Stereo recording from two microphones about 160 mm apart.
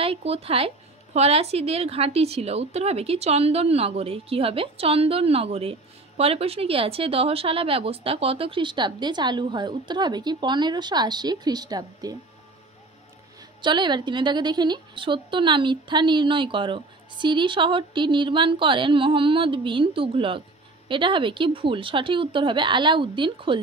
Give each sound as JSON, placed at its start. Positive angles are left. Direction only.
{"t": 0.0, "sound": "a woman's voice", "side_deg": -35}
{"t": 13.6, "sound": "a woman's voice", "side_deg": -30}